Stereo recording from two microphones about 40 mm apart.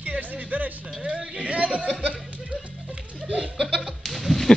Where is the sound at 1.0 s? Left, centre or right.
Right.